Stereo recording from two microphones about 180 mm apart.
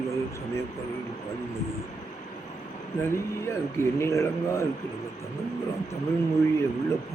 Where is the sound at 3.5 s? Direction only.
15° left (ahead or behind).